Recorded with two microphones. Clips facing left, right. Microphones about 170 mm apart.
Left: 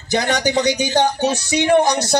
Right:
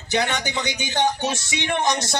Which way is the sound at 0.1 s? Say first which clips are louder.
Left 6 dB; 40° left (ahead or behind).